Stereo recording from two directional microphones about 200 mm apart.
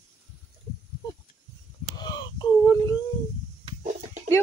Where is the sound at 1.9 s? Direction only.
20° left (ahead or behind).